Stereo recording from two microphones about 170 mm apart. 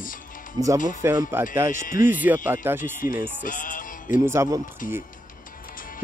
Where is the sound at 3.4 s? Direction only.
50° left (ahead or behind).